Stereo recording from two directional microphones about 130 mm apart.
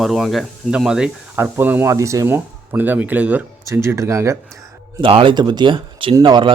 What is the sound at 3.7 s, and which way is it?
Speech, 20° right (ahead or behind).